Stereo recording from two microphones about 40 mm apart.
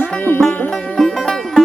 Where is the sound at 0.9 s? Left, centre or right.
Centre.